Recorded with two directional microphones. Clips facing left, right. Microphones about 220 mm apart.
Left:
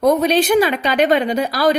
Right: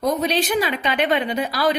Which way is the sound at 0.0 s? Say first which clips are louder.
Left 6 dB; 50° left (ahead or behind).